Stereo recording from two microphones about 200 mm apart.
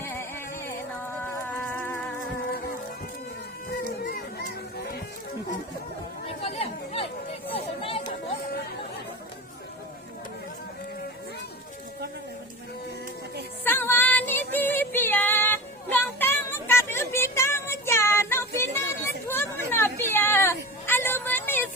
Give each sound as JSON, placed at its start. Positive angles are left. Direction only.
{"t": 0.0, "sound": "music", "side_deg": 15}
{"t": 3.7, "sound": "a sound", "side_deg": 45}
{"t": 6.2, "sound": "chatter", "side_deg": 30}
{"t": 7.5, "sound": "music", "side_deg": 30}
{"t": 13.7, "sound": "music", "side_deg": 10}
{"t": 19.3, "sound": "a sound", "side_deg": 10}